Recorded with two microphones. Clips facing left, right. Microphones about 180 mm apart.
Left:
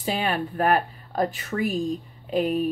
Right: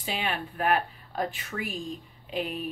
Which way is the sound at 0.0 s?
40° left (ahead or behind).